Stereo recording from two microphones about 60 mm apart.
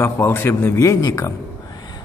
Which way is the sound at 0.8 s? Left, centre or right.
Left.